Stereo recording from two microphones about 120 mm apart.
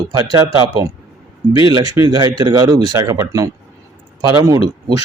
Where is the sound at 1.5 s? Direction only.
35° right (ahead or behind).